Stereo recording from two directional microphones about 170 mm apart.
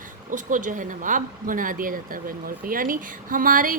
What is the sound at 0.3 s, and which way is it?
Speech, 50° right (ahead or behind).